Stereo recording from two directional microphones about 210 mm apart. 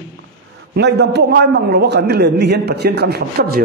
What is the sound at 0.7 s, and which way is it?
A man's voice, 55° right (ahead or behind).